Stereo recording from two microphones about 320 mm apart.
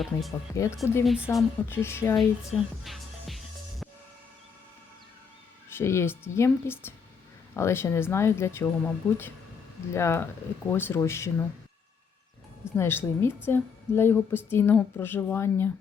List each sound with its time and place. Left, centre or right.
0.0 s a woman's voice: centre
2.8 s music: centre
5.7 s a woman's voice: centre
12.7 s a woman's voice: centre